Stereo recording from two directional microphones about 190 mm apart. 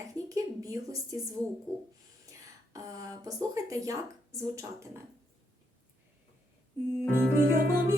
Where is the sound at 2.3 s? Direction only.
20° right (ahead or behind).